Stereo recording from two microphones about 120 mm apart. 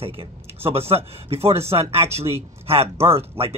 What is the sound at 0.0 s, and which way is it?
A man's voice, 50° right (ahead or behind).